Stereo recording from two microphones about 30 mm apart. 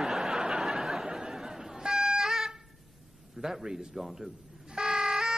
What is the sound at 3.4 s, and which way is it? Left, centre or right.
Speech, centre.